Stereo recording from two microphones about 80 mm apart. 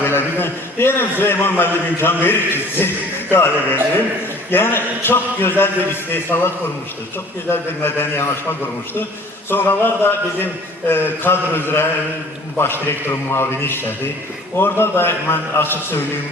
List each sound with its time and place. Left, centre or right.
0.0 s a man's voice: left
7.5 s speech: left